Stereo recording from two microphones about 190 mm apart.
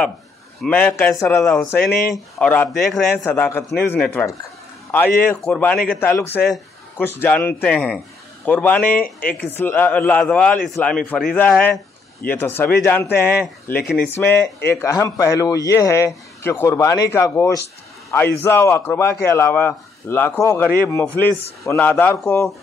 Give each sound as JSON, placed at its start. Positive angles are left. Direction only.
{"t": 0.6, "sound": "speech", "side_deg": 10}
{"t": 9.0, "sound": "speech", "side_deg": 50}
{"t": 9.4, "sound": "a man's voice", "side_deg": 10}